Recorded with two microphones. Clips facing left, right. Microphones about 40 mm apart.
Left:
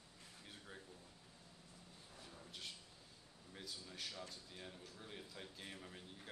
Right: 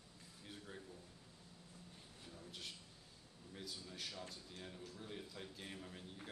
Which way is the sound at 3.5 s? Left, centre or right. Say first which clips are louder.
Right 1 dB; centre.